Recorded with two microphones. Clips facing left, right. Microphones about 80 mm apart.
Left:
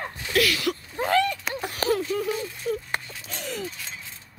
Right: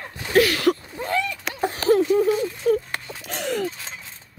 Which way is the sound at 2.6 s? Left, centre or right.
Right.